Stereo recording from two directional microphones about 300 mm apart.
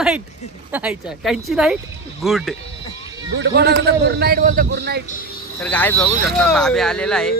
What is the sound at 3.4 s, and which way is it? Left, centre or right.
A man's voice, right.